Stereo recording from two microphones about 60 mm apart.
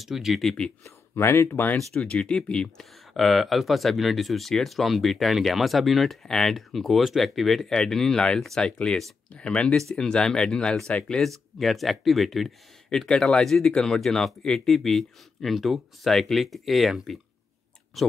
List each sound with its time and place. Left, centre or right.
0.0 s speech: centre
0.8 s speech: left
2.0 s speech: centre
2.8 s speech: centre
9.7 s speech: centre